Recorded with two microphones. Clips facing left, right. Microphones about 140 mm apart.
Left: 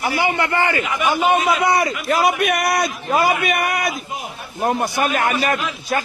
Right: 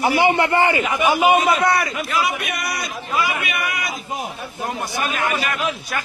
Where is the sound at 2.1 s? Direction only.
55° left (ahead or behind).